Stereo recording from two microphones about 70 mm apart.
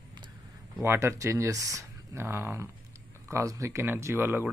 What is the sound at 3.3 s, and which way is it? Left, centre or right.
Speech, right.